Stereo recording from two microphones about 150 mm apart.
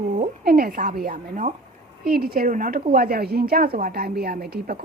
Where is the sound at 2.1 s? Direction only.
80° right.